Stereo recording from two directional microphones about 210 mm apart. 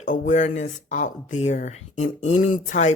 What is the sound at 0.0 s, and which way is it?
Speech, 35° left (ahead or behind).